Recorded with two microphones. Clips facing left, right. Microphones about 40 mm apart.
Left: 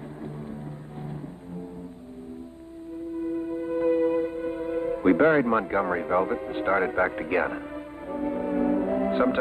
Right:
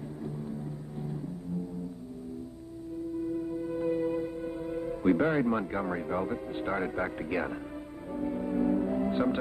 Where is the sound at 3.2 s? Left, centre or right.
Left.